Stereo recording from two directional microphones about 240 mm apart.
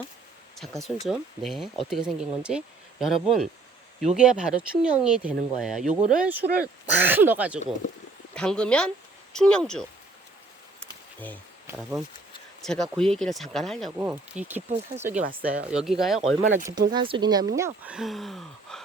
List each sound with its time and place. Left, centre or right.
0.8 s speech: centre
8.4 s speech: centre
12.6 s speech: centre
15.1 s speech: right
15.4 s speech: centre
16.9 s speech: centre
17.6 s speech: centre